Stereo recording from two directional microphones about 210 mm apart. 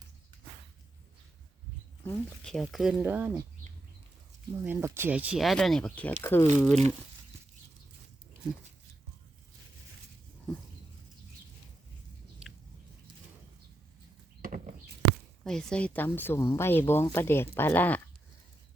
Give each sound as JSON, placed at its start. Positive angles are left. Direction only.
{"t": 2.0, "sound": "speech", "side_deg": 5}
{"t": 4.6, "sound": "speech", "side_deg": -10}
{"t": 14.4, "sound": "a sound", "side_deg": -40}
{"t": 15.4, "sound": "speech", "side_deg": 5}